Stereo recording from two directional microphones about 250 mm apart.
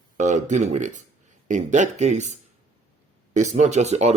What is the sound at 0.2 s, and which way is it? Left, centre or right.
Speech, right.